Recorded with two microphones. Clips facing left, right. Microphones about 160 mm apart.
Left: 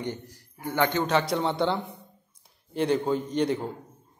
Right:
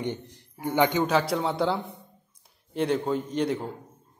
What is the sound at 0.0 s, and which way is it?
A man's voice, 20° right (ahead or behind).